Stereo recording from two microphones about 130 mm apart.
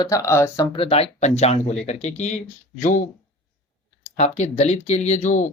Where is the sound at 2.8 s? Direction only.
70° left (ahead or behind).